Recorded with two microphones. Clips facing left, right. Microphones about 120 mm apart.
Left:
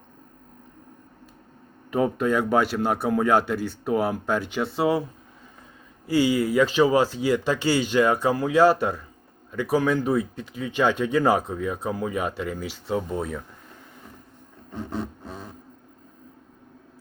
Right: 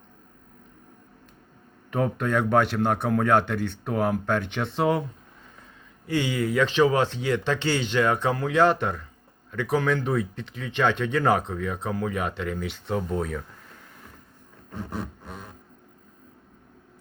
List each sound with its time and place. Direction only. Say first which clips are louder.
1.9 s speech: left 3 dB; 5° left (ahead or behind)
6.1 s speech: left 4 dB; 10° left (ahead or behind)
14.8 s music: left 4 dB; 30° left (ahead or behind)